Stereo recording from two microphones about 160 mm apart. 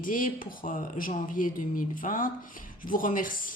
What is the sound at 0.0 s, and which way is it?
Speech, 60° left (ahead or behind).